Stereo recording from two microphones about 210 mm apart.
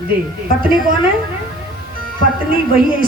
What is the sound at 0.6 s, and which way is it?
Speech, 45° right (ahead or behind).